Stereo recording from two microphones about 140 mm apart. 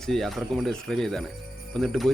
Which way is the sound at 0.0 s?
5° left (ahead or behind).